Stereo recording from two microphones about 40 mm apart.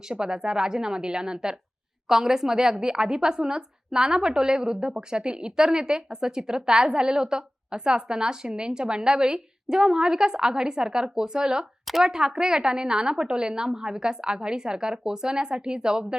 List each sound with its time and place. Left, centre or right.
0.1 s a woman's voice: centre